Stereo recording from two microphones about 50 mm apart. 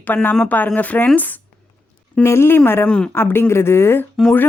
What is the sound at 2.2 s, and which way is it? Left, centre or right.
Speech, left.